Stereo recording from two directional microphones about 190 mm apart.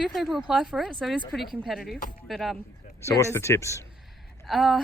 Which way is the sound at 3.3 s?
15° left (ahead or behind).